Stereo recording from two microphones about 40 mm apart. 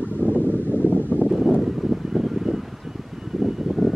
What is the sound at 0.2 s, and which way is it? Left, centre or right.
Wind, right.